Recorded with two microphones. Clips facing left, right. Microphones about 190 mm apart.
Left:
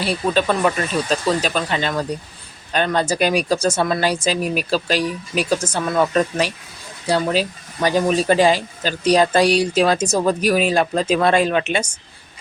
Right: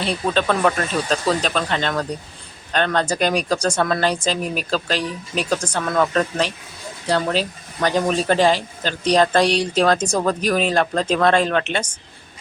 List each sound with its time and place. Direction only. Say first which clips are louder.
0.0 s speech: left 1 dB; 5° left (ahead or behind)